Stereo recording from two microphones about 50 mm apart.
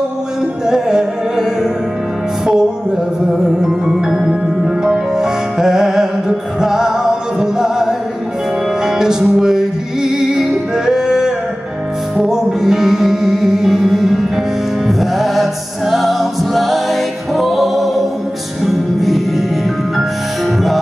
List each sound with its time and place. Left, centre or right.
0.7 s music: centre
3.3 s music: centre
8.8 s music: centre
10.9 s a sound: centre
12.2 s music: centre